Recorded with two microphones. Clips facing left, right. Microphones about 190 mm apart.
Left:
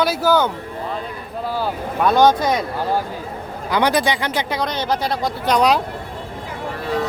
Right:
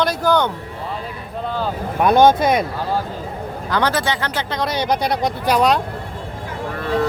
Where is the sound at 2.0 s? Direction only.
15° right (ahead or behind).